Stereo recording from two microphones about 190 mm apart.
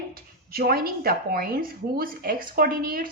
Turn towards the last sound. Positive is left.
turn(degrees=-50)  # may be behind; listen again after turning